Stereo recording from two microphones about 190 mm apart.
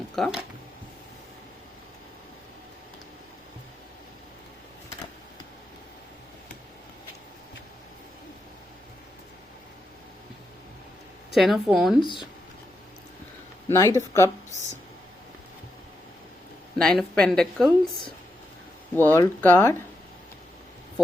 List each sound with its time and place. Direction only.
0.2 s a woman's voice: 5° right (ahead or behind)
11.3 s a woman's voice: centre (ahead or behind)
12.0 s speech: 25° left (ahead or behind)
13.7 s speech: 15° left (ahead or behind)
16.7 s a woman's voice: 5° left (ahead or behind)